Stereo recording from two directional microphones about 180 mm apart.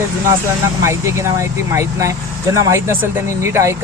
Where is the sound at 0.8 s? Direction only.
15° right (ahead or behind).